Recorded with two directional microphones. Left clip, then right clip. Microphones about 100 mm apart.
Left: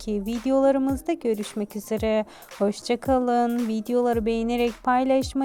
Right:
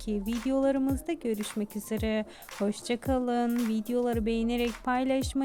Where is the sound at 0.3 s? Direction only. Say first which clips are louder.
Left 7 dB; 45° left (ahead or behind).